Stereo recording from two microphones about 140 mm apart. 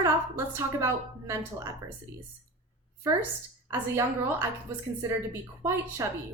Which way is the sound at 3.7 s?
15° right (ahead or behind).